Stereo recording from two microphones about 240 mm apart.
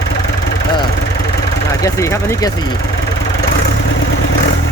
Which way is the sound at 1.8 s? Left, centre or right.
Centre.